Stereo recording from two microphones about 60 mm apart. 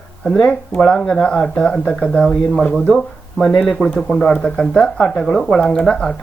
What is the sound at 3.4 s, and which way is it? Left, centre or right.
Speech, centre.